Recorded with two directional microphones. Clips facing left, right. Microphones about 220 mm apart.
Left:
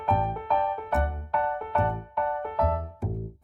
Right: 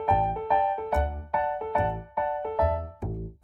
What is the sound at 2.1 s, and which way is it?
Music, 15° right (ahead or behind).